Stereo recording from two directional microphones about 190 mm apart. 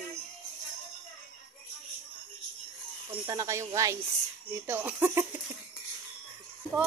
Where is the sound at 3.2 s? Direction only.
20° right (ahead or behind).